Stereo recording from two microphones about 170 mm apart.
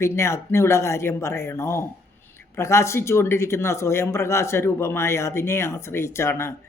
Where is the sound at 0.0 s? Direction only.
15° left (ahead or behind).